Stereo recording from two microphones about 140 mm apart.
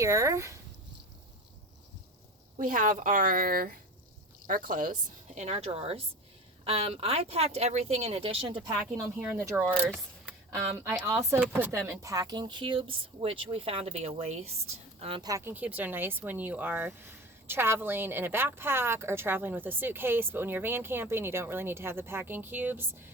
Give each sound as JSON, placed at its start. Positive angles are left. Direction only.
{"t": 0.0, "sound": "speech", "side_deg": -20}
{"t": 2.6, "sound": "speech", "side_deg": -70}
{"t": 4.4, "sound": "a woman's voice", "side_deg": -80}
{"t": 8.6, "sound": "speech", "side_deg": -25}
{"t": 9.1, "sound": "speech", "side_deg": -15}
{"t": 15.2, "sound": "speech", "side_deg": -20}